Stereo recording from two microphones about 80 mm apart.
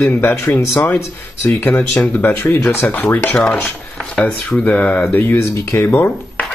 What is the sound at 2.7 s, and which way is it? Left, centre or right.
Speech, left.